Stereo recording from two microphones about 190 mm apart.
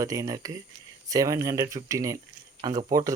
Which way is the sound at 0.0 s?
15° right (ahead or behind).